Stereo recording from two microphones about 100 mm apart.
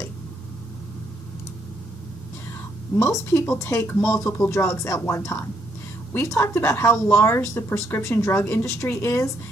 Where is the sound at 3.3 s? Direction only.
25° left (ahead or behind).